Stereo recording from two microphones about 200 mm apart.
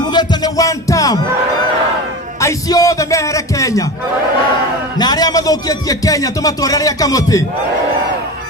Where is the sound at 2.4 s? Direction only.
15° left (ahead or behind).